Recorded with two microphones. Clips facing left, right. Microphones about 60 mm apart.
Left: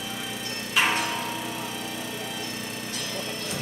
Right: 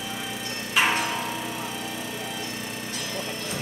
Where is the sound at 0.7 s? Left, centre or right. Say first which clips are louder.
Right 1 dB; right.